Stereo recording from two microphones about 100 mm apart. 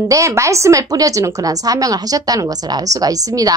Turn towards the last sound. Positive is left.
turn(degrees=-35)  # may be behind; listen again after turning